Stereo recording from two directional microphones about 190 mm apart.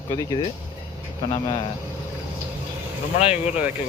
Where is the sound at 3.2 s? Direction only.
35° left (ahead or behind).